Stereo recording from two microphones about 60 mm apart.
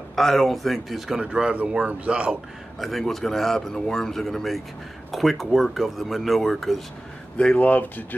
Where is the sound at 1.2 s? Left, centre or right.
Centre.